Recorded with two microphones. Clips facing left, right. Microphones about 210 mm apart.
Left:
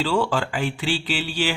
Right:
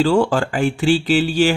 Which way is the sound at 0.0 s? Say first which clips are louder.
Right 7 dB; 45° right (ahead or behind).